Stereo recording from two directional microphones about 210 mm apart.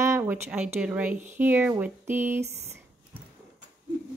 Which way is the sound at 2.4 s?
30° right (ahead or behind).